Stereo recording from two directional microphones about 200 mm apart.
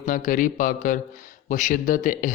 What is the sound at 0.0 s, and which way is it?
A man's voice, 40° left (ahead or behind).